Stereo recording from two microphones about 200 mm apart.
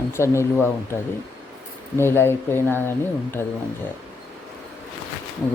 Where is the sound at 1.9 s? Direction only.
10° left (ahead or behind).